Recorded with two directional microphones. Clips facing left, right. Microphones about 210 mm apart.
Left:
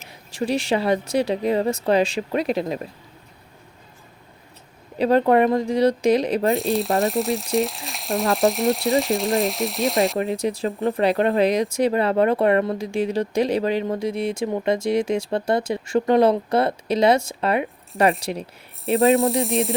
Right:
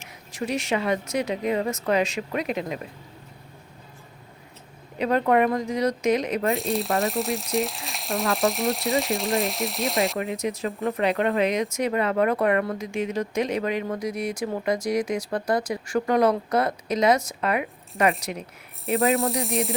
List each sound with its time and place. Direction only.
0.1 s speech: 30° left (ahead or behind)
4.9 s speech: 30° left (ahead or behind)
6.5 s frying: centre (ahead or behind)
10.2 s speech: 30° left (ahead or behind)
18.9 s frying: centre (ahead or behind)